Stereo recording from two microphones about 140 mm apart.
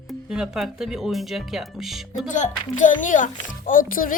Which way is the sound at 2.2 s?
60° left (ahead or behind).